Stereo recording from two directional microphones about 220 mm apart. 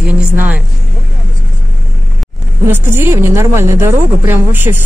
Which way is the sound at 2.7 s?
10° right (ahead or behind).